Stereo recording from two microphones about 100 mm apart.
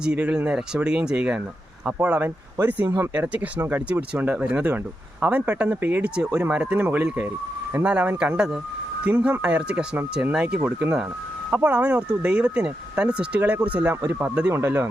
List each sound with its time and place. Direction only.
0.0 s speech: 10° right (ahead or behind); by 14.8 s 25° right (ahead or behind)